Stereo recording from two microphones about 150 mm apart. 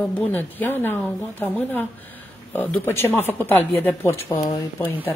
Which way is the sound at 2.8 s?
15° left (ahead or behind).